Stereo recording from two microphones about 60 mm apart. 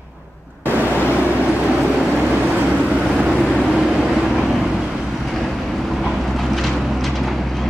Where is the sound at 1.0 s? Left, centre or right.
Right.